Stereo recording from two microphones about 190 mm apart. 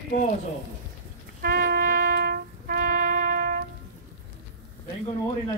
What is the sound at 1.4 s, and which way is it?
Music, 50° right (ahead or behind).